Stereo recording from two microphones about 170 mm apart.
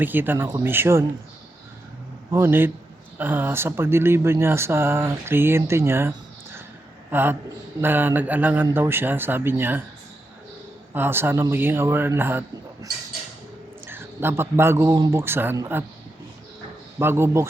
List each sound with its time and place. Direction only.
0.0 s speech: 10° right (ahead or behind)
2.3 s speech: 15° right (ahead or behind)
10.9 s speech: 15° right (ahead or behind)
17.0 s speech: 15° right (ahead or behind)